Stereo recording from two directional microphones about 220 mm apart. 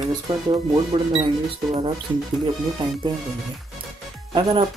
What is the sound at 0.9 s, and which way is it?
Speech, 25° right (ahead or behind).